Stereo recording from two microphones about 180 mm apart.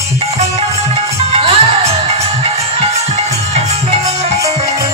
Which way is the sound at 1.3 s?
35° right (ahead or behind).